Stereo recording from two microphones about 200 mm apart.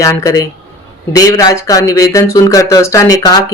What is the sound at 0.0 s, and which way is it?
Speech, 15° left (ahead or behind).